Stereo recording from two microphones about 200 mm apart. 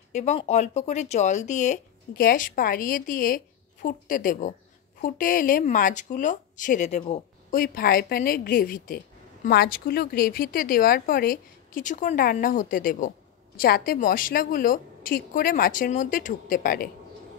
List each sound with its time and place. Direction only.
0.1 s speech: 35° left (ahead or behind)
7.5 s a woman's voice: 45° left (ahead or behind)